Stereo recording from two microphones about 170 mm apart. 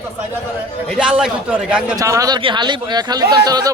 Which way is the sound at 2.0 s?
20° right (ahead or behind).